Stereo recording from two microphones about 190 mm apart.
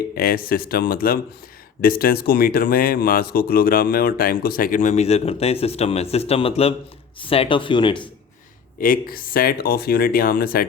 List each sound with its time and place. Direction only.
0.2 s speech: 50° left (ahead or behind); by 8.1 s 25° left (ahead or behind)
8.8 s speech: 50° left (ahead or behind)